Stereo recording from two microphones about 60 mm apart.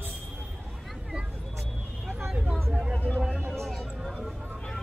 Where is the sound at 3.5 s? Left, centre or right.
Centre.